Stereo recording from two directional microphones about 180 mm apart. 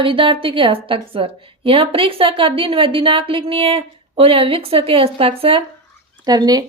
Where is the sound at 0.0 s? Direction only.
30° right (ahead or behind).